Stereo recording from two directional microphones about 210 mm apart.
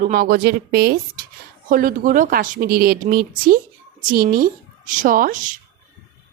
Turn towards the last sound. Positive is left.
turn(degrees=-40)  # may be behind; listen again after turning